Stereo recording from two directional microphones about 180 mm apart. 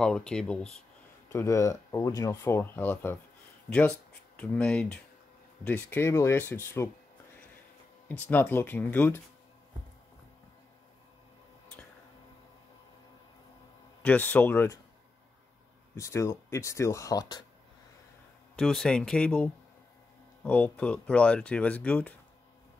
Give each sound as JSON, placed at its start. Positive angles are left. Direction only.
{"t": 0.0, "sound": "speech", "side_deg": 5}
{"t": 1.3, "sound": "speech", "side_deg": 15}
{"t": 8.1, "sound": "speech", "side_deg": 10}
{"t": 14.0, "sound": "speech", "side_deg": 10}
{"t": 16.0, "sound": "speech", "side_deg": 15}
{"t": 18.6, "sound": "speech", "side_deg": 5}